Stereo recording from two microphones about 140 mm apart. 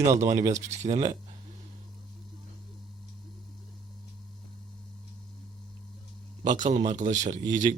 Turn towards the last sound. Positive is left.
turn(degrees=-60)  # may be behind; listen again after turning